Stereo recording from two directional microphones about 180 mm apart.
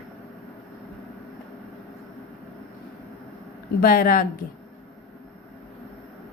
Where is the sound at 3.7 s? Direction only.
55° left (ahead or behind).